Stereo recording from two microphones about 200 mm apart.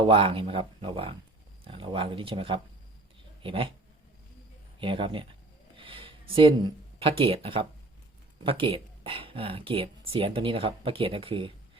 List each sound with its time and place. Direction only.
0.0 s speech: 25° right (ahead or behind)
4.8 s speech: 25° right (ahead or behind)
5.7 s a sound: 25° right (ahead or behind)
7.0 s speech: 30° right (ahead or behind)